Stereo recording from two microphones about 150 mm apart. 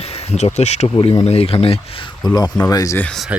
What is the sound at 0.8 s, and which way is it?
Speech, 35° left (ahead or behind).